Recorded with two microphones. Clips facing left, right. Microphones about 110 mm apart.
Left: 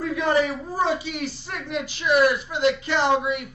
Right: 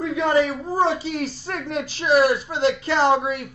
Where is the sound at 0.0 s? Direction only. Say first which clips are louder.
Right 2 dB; 25° right (ahead or behind).